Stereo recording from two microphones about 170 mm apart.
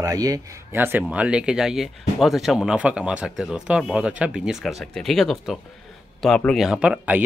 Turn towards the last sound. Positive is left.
turn(degrees=-10)  # may be behind; listen again after turning